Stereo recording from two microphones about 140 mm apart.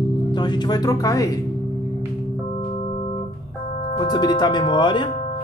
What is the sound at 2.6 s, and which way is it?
Organ, 45° left (ahead or behind).